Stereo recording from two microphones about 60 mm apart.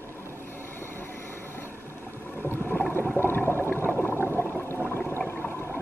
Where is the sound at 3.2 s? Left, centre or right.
Left.